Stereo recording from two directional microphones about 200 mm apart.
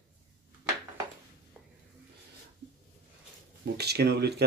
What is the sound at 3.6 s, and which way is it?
Speech, 55° right (ahead or behind).